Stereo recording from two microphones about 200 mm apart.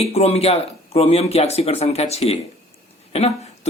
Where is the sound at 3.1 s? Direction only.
30° left (ahead or behind).